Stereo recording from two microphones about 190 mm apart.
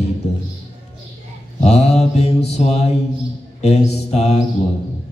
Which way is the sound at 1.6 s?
35° left (ahead or behind).